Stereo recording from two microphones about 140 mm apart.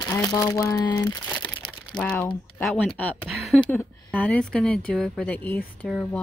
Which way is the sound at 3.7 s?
10° left (ahead or behind).